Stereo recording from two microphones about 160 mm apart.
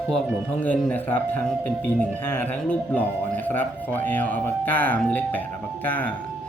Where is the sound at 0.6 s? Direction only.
10° left (ahead or behind).